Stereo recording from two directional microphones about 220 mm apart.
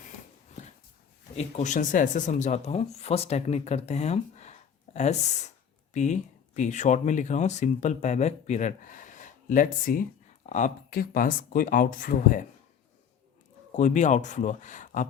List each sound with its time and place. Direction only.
0.5 s dog: 30° left (ahead or behind)
1.4 s speech: 35° left (ahead or behind)
13.7 s speech: 35° left (ahead or behind)